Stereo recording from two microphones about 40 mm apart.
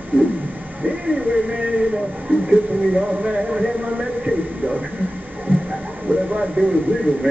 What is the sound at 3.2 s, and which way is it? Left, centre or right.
Speech, right.